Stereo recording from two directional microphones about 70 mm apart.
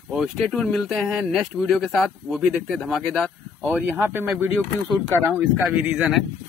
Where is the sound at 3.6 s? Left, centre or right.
Right.